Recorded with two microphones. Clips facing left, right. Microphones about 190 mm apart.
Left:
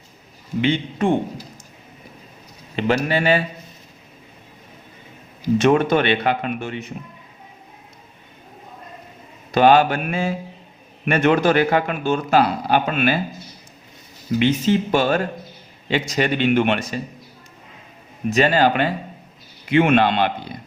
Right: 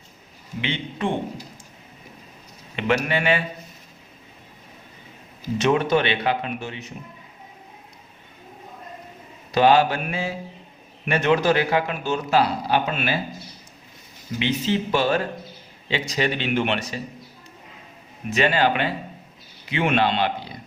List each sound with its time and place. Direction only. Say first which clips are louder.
0.6 s speech: left 7 dB; 45° left (ahead or behind)
2.7 s a man's voice: left 3 dB; 35° left (ahead or behind)
5.5 s speech: left 3 dB; 50° left (ahead or behind)
9.5 s speech: left 3 dB; 55° left (ahead or behind)
14.3 s speech: left 6 dB; 50° left (ahead or behind)
18.3 s a man's voice: left 4 dB; 40° left (ahead or behind)
19.6 s speech: left 6 dB; 55° left (ahead or behind)